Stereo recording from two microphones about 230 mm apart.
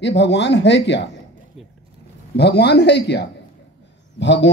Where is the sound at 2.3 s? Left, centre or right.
Left.